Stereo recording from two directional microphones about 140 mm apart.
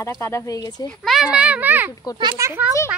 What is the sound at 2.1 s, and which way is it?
Speech, 30° right (ahead or behind).